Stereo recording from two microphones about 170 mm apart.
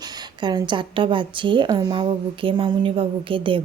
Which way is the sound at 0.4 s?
25° right (ahead or behind).